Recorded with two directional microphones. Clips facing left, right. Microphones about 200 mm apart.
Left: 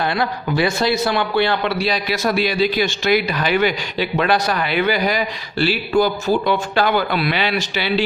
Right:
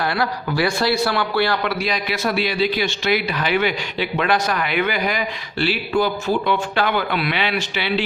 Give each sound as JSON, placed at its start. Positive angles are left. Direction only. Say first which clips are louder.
{"t": 0.2, "sound": "a man's voice", "louder": "left 2 dB", "side_deg": 20}